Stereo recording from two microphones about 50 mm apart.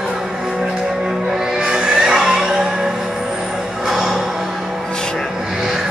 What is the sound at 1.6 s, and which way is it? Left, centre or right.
Music, centre.